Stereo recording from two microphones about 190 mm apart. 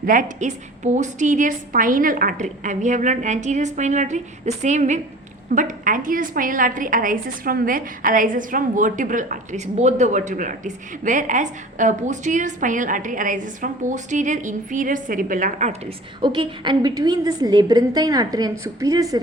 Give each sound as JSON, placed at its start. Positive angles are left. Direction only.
{"t": 0.0, "sound": "a woman's voice", "side_deg": -45}
{"t": 16.2, "sound": "a woman's voice", "side_deg": -25}